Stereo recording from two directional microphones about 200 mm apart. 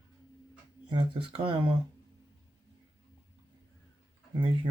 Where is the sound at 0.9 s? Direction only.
25° right (ahead or behind).